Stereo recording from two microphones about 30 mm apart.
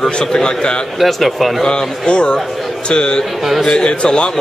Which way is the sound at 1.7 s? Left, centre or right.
Left.